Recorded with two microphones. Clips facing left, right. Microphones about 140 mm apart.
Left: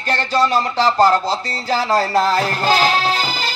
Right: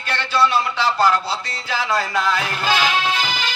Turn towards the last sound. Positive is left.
turn(degrees=40)  # may be behind; listen again after turning